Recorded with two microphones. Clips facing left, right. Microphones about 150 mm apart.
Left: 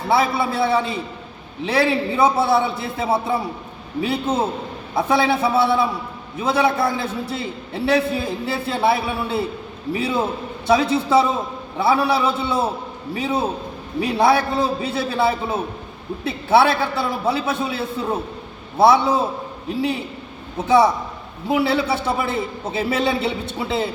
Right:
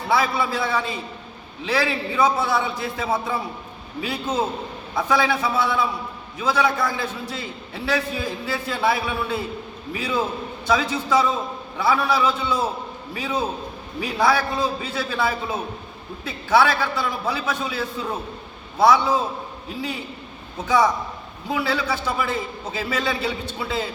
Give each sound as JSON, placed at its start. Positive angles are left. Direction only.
{"t": 0.1, "sound": "a man's voice", "side_deg": 25}
{"t": 20.7, "sound": "a man's voice", "side_deg": 30}